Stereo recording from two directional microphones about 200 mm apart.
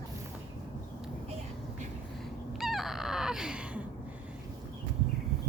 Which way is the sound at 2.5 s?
Centre (ahead or behind).